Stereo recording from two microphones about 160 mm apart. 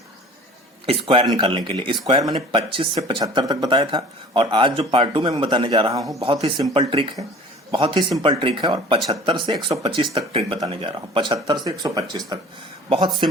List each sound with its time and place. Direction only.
0.9 s speech: 35° right (ahead or behind)
6.1 s speech: 35° right (ahead or behind)